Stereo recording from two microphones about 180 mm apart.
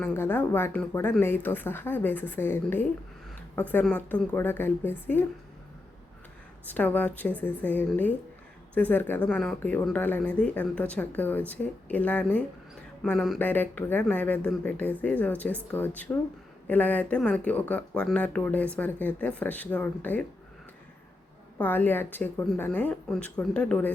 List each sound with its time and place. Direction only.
0.0 s speech: 10° left (ahead or behind)
6.7 s speech: 10° left (ahead or behind)
21.6 s speech: 10° left (ahead or behind)